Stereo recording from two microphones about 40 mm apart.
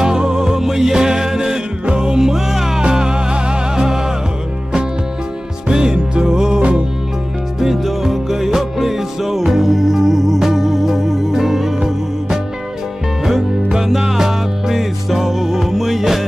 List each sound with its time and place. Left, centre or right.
0.0 s music: centre
5.7 s music: centre
7.6 s music: centre
13.7 s music: centre